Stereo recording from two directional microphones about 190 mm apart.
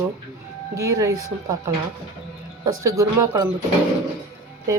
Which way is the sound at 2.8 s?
15° right (ahead or behind).